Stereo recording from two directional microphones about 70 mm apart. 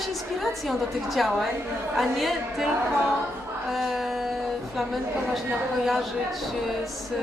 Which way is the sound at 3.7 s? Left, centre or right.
Centre.